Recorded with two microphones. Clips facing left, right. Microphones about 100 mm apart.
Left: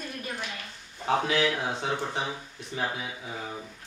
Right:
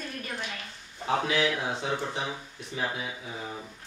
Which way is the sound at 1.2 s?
40° left (ahead or behind).